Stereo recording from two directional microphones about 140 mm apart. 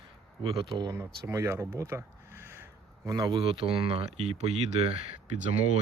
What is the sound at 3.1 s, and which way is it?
Speech, 30° right (ahead or behind).